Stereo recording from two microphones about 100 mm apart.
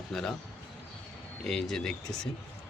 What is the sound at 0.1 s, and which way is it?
Speech, 5° left (ahead or behind).